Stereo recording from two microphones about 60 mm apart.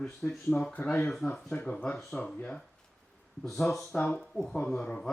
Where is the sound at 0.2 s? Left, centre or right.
Centre.